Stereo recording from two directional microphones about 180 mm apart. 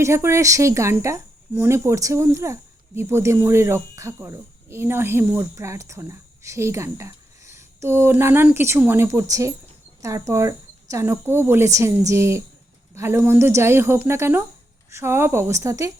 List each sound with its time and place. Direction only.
0.0 s a woman's voice: 15° right (ahead or behind)